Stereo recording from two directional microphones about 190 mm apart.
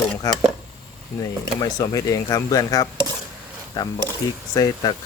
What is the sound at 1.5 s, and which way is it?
Speech, 20° left (ahead or behind).